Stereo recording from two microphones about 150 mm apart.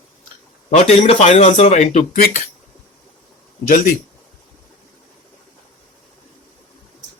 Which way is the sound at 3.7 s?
70° left (ahead or behind).